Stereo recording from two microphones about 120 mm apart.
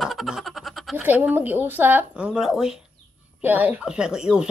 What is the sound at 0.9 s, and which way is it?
A woman's voice, 15° right (ahead or behind).